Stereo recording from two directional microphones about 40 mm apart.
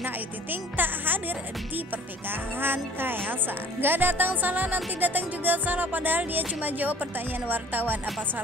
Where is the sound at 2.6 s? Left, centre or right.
Right.